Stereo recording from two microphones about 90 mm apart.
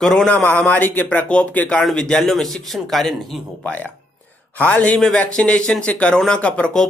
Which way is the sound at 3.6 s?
15° left (ahead or behind).